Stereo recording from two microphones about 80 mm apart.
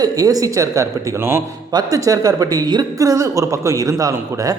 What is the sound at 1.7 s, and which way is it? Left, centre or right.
A man's voice, right.